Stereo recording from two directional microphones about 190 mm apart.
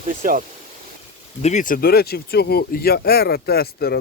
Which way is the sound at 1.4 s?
40° left (ahead or behind).